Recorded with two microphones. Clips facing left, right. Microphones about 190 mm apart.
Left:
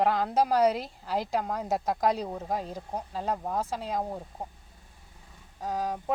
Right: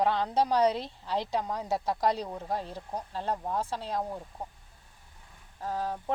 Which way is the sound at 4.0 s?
25° left (ahead or behind).